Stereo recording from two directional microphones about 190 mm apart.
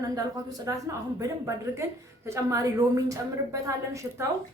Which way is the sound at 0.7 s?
20° right (ahead or behind).